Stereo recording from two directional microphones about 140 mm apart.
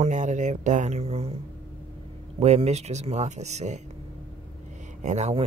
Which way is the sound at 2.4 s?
50° right (ahead or behind).